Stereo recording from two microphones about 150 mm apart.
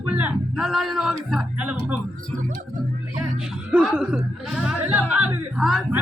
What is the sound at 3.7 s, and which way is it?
Speech, 10° right (ahead or behind).